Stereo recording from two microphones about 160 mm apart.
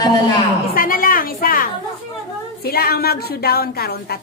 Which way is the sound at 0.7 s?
60° left (ahead or behind).